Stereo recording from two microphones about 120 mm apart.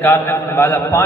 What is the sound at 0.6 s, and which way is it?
Speech, 15° left (ahead or behind).